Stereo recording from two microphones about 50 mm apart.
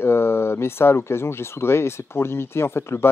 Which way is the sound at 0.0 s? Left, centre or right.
Left.